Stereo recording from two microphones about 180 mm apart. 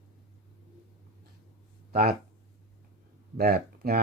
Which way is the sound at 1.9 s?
55° right (ahead or behind).